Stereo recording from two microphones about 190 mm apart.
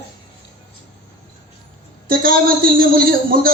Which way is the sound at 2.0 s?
50° right (ahead or behind).